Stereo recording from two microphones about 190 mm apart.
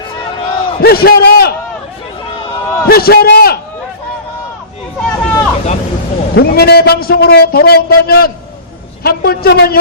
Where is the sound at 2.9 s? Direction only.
55° left (ahead or behind).